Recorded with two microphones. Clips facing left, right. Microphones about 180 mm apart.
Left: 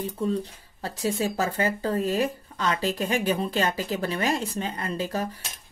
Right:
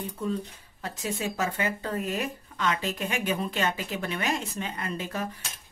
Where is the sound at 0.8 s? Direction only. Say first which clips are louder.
Left 5 dB; 35° left (ahead or behind).